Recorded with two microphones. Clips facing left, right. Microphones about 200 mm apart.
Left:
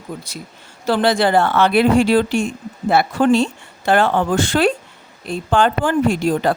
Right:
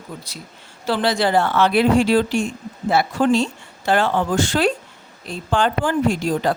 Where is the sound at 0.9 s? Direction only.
50° left (ahead or behind).